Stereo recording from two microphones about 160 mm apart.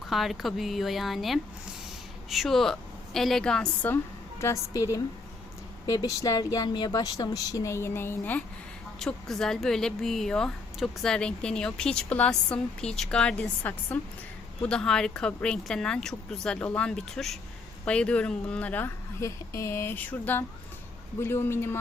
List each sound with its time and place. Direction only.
0.1 s speech: centre (ahead or behind)
4.4 s speech: 20° left (ahead or behind)